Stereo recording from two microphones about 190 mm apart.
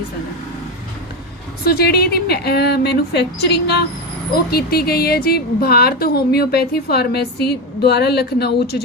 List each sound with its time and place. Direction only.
1.6 s a woman's voice: 55° left (ahead or behind)